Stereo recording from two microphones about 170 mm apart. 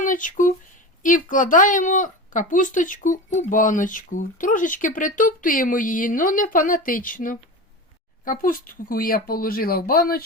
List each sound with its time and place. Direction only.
0.0 s speech: 50° left (ahead or behind)